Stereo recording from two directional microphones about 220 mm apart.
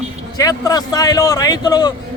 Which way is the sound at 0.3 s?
15° left (ahead or behind).